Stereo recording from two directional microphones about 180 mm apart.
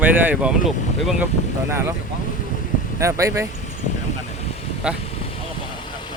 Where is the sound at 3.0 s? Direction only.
15° right (ahead or behind).